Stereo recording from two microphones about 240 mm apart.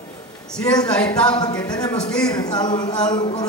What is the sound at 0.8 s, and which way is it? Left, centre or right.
Speech, centre.